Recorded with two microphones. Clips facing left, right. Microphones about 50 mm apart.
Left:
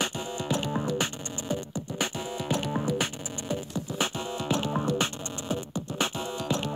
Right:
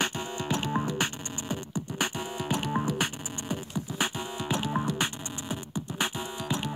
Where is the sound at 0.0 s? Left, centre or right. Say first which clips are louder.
Even; right.